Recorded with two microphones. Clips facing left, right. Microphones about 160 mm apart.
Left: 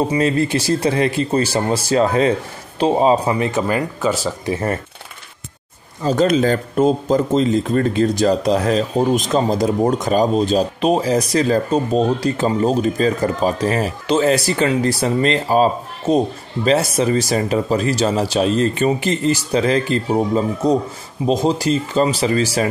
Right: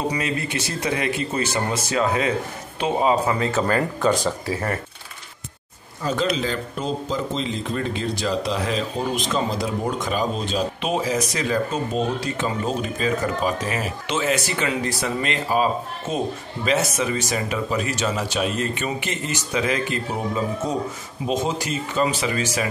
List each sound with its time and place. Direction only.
0.1 s speech: 30° left (ahead or behind); by 4.3 s 5° left (ahead or behind)
4.5 s speech: 25° left (ahead or behind)
6.0 s speech: 45° left (ahead or behind)